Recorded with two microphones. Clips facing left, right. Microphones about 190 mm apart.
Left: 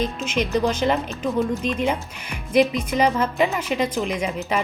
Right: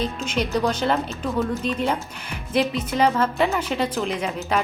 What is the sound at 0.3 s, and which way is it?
Speech, 35° right (ahead or behind).